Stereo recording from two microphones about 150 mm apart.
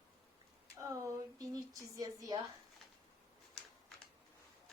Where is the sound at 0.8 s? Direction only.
20° right (ahead or behind).